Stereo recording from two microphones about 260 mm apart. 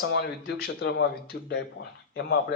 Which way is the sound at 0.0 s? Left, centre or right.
Left.